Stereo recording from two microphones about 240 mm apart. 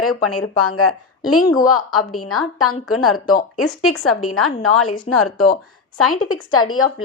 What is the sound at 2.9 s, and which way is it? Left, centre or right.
A woman's voice, left.